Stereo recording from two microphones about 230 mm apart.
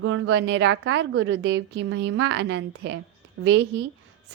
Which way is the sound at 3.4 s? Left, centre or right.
Right.